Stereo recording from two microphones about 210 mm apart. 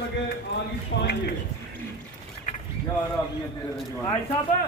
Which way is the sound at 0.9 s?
60° left (ahead or behind).